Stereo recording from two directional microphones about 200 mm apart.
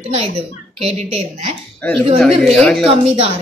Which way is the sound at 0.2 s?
30° right (ahead or behind).